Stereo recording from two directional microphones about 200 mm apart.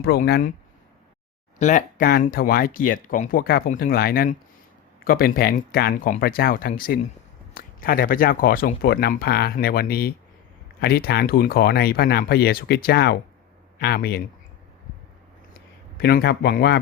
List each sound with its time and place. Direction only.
0.0 s speech: 50° left (ahead or behind)
1.5 s speech: 40° left (ahead or behind)
16.0 s speech: 55° left (ahead or behind)